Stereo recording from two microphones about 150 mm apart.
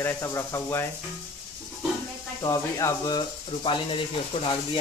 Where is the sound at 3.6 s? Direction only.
35° left (ahead or behind).